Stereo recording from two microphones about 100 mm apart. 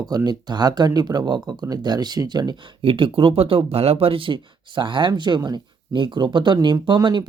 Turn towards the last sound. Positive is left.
turn(degrees=-50)  # may be behind; listen again after turning